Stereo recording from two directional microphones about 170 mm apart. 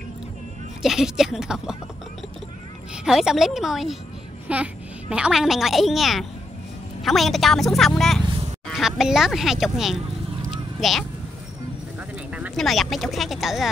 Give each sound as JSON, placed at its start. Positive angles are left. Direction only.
{"t": 0.8, "sound": "a woman's voice", "side_deg": -5}
{"t": 3.1, "sound": "a woman's voice", "side_deg": 0}
{"t": 10.5, "sound": "clip-clop", "side_deg": 0}
{"t": 12.3, "sound": "speech", "side_deg": -5}